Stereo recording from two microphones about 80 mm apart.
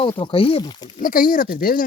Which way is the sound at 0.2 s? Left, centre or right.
Left.